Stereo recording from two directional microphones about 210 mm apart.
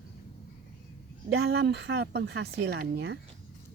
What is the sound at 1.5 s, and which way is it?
A woman's voice, 50° right (ahead or behind).